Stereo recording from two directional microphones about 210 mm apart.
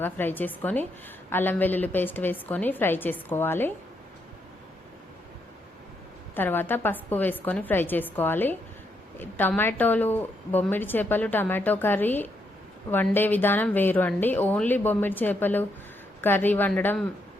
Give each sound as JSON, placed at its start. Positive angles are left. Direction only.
{"t": 0.0, "sound": "a woman's voice", "side_deg": 10}
{"t": 6.3, "sound": "a woman's voice", "side_deg": 10}